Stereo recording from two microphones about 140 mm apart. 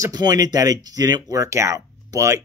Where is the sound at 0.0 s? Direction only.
25° right (ahead or behind).